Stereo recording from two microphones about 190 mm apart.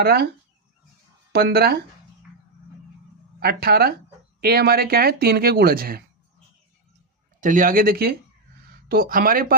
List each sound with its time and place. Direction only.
0.0 s speech: 55° right (ahead or behind)
1.3 s speech: 55° right (ahead or behind)
3.4 s speech: 55° right (ahead or behind)
7.4 s speech: 45° right (ahead or behind)